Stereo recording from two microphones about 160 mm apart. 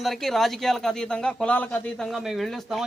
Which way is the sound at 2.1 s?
Centre (ahead or behind).